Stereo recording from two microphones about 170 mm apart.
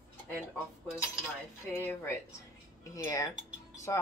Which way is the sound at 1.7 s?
15° left (ahead or behind).